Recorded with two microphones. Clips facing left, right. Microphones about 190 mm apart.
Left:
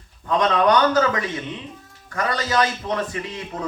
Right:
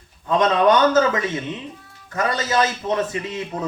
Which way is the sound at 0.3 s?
25° right (ahead or behind).